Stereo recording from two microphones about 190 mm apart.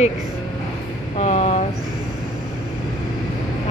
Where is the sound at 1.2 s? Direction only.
35° left (ahead or behind).